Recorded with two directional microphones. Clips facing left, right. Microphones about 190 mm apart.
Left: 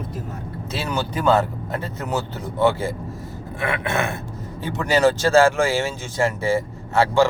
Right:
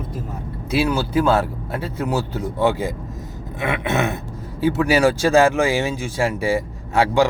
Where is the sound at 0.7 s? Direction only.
10° right (ahead or behind).